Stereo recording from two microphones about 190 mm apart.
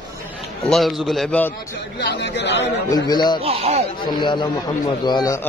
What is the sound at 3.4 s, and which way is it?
Speech, 30° right (ahead or behind).